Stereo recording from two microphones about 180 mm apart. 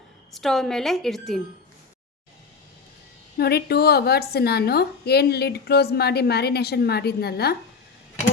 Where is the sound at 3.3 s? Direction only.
60° left (ahead or behind).